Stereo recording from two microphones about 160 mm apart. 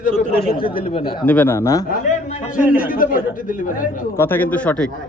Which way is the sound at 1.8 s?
55° left (ahead or behind).